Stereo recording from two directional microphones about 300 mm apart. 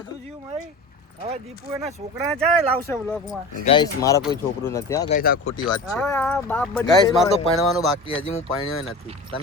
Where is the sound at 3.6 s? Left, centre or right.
Centre.